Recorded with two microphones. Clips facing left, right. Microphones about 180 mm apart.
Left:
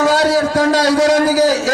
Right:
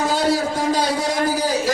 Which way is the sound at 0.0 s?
85° left.